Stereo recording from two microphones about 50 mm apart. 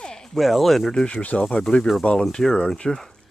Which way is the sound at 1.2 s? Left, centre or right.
Left.